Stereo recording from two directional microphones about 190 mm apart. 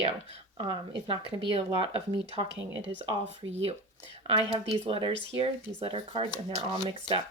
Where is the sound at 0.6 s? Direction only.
30° right (ahead or behind).